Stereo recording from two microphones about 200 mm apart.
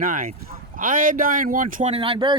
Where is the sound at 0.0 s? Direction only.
45° right (ahead or behind).